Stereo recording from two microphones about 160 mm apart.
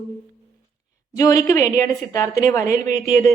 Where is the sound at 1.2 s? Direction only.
20° left (ahead or behind).